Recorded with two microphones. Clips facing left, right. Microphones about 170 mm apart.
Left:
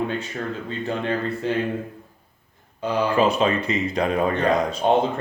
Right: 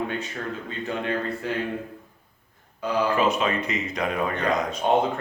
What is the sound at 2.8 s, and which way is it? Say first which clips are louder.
Speech: left 2 dB; 30° left (ahead or behind).